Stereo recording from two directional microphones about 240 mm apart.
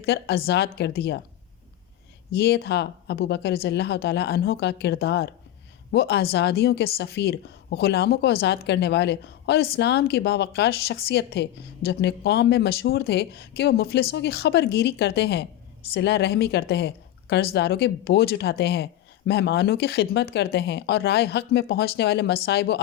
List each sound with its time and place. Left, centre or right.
0.0 s a woman's voice: left
2.3 s a woman's voice: left